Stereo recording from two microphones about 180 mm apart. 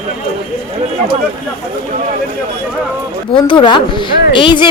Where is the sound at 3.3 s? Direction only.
25° left (ahead or behind).